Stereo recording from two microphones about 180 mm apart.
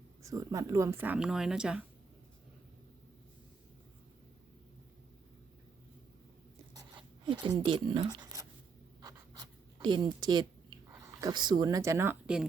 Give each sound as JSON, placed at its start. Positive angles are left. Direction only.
{"t": 0.2, "sound": "speech", "side_deg": -20}
{"t": 7.6, "sound": "speech", "side_deg": -25}
{"t": 9.0, "sound": "writing", "side_deg": -20}
{"t": 10.9, "sound": "speech", "side_deg": -20}